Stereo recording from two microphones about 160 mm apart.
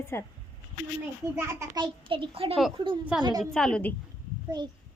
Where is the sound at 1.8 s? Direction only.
30° right (ahead or behind).